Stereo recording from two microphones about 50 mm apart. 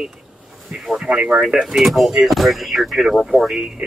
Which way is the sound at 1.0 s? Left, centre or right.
Centre.